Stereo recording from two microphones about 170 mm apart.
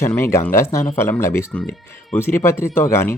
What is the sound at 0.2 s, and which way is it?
Speech, 15° left (ahead or behind).